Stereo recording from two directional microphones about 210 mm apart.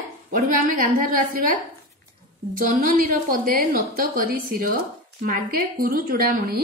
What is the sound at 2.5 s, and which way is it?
A woman's voice, 40° right (ahead or behind).